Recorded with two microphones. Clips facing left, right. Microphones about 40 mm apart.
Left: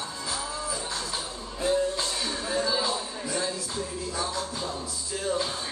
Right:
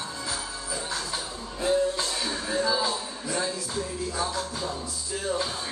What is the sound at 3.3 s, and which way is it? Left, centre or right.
Speech, centre.